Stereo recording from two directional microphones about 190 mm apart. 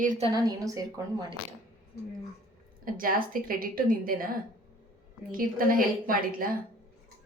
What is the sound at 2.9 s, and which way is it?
A woman's voice, 50° right (ahead or behind).